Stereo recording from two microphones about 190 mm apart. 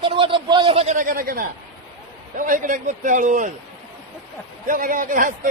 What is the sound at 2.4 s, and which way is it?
A man's voice, 45° right (ahead or behind).